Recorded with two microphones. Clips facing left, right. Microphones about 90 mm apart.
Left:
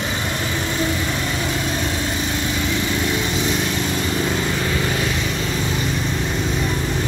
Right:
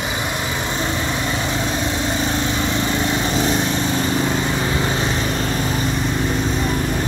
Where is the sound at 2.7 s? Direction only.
35° right (ahead or behind).